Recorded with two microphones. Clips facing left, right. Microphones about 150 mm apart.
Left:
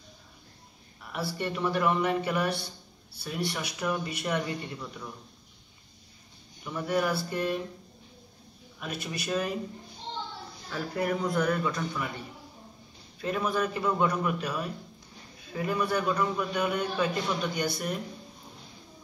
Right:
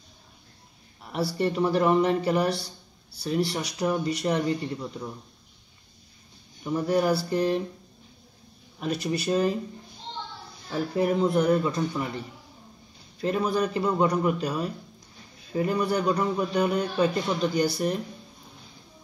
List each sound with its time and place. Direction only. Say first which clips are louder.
1.0 s a man's voice: right 6 dB; 35° right (ahead or behind)
6.6 s a man's voice: right 5 dB; 35° right (ahead or behind)
8.7 s a man's voice: right 8 dB; 35° right (ahead or behind)
10.7 s a man's voice: right 5 dB; 25° right (ahead or behind)
13.2 s a man's voice: right 4 dB; 35° right (ahead or behind)